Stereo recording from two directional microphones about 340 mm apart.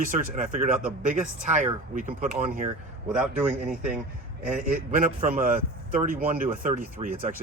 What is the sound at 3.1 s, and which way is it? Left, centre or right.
Speech, centre.